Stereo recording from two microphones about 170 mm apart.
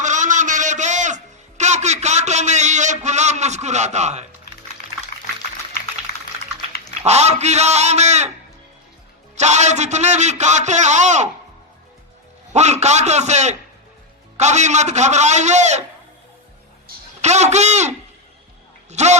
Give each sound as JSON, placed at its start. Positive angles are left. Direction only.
{"t": 0.0, "sound": "music", "side_deg": -45}
{"t": 7.0, "sound": "a man's voice", "side_deg": -40}
{"t": 9.3, "sound": "a man's voice", "side_deg": -40}
{"t": 12.5, "sound": "a man's voice", "side_deg": -40}
{"t": 17.2, "sound": "a man's voice", "side_deg": -40}